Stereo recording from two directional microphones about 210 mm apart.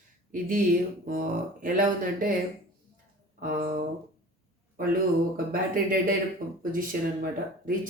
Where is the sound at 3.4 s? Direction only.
45° right (ahead or behind).